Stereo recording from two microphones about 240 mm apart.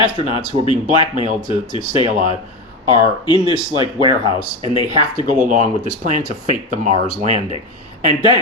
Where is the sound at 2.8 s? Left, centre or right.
Centre.